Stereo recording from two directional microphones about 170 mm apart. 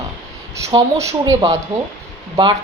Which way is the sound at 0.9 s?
20° right (ahead or behind).